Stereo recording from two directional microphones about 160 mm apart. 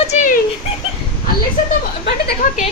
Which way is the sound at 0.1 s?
50° left (ahead or behind).